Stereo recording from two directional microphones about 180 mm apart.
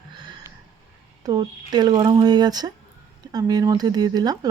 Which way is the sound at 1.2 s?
25° right (ahead or behind).